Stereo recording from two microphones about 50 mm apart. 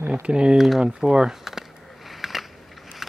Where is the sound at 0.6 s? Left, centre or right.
Centre.